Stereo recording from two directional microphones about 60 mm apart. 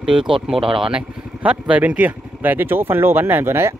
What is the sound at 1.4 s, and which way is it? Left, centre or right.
Speech, right.